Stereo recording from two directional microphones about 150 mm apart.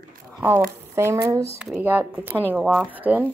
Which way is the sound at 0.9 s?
20° right (ahead or behind).